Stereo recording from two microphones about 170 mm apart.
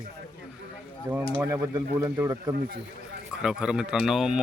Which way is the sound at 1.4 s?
15° right (ahead or behind).